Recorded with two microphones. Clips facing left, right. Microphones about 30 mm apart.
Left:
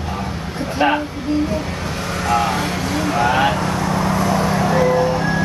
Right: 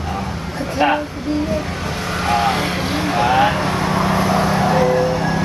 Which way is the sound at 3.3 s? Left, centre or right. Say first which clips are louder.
Right 3 dB; centre.